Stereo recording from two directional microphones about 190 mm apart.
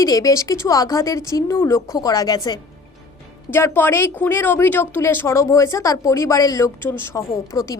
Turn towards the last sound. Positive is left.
turn(degrees=15)  # may be behind; listen again after turning